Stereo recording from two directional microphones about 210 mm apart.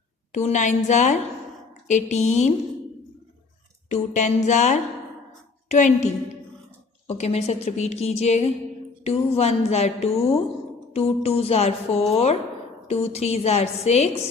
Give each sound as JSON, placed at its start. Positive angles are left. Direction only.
{"t": 0.3, "sound": "a woman's voice", "side_deg": 35}
{"t": 3.8, "sound": "a woman's voice", "side_deg": 35}
{"t": 7.1, "sound": "a woman's voice", "side_deg": 30}